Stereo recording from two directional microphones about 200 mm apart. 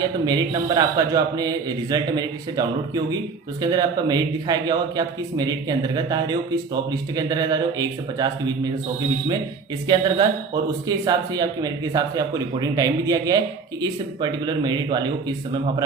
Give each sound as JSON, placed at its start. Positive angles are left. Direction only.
{"t": 0.3, "sound": "speech", "side_deg": -20}
{"t": 9.8, "sound": "speech", "side_deg": -20}